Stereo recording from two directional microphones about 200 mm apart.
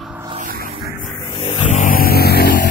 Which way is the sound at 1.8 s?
45° left (ahead or behind).